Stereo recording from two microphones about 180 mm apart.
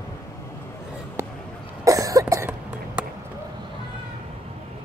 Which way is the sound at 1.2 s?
15° right (ahead or behind).